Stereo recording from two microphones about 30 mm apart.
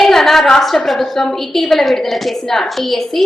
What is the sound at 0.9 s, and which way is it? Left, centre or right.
A woman's voice, centre.